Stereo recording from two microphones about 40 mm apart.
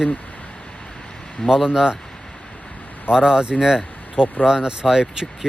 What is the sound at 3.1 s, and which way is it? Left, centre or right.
Speech, centre.